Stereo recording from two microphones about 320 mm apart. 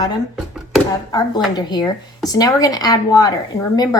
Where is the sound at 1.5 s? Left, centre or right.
Centre.